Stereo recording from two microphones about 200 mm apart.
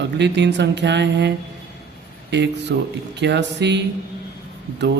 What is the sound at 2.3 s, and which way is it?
Speech, 60° right (ahead or behind).